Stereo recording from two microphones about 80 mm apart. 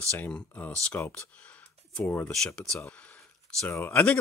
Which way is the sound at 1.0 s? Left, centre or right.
Left.